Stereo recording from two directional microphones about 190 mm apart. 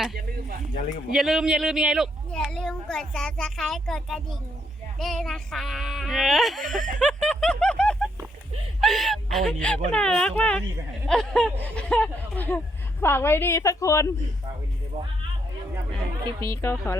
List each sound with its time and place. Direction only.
1.1 s speech: 5° right (ahead or behind)
7.0 s snicker: 5° left (ahead or behind)
8.8 s a woman's voice: centre (ahead or behind)
16.4 s a woman's voice: 15° left (ahead or behind)